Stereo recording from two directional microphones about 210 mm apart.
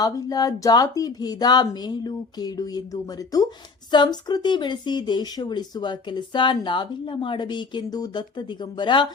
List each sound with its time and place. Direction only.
0.0 s speech: 15° left (ahead or behind)